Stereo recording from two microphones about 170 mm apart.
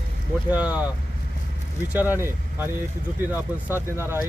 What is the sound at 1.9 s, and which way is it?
Speech, 10° right (ahead or behind).